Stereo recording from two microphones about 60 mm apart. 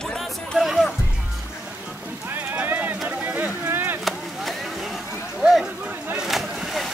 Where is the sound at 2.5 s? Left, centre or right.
Right.